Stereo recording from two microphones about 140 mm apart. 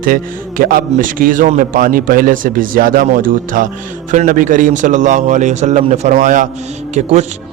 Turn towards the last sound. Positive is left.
turn(degrees=-55)  # may be behind; listen again after turning